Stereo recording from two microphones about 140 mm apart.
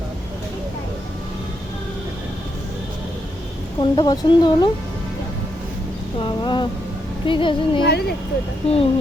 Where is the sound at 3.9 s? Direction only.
35° left (ahead or behind).